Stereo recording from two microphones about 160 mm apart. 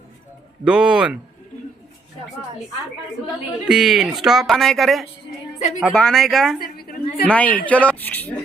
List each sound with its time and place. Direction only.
0.6 s speech: 5° right (ahead or behind)
3.7 s speech: 5° right (ahead or behind)
5.5 s a woman's voice: 50° left (ahead or behind)
5.8 s speech: 5° left (ahead or behind)
6.6 s a sound: 70° left (ahead or behind)
7.3 s speech: 10° left (ahead or behind)